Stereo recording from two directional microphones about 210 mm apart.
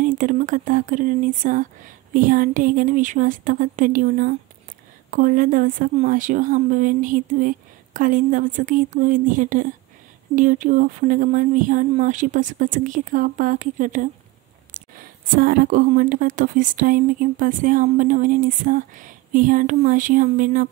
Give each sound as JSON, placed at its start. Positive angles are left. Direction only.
{"t": 0.0, "sound": "speech", "side_deg": -40}